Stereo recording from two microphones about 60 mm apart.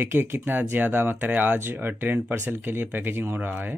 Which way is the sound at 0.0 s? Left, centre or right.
Right.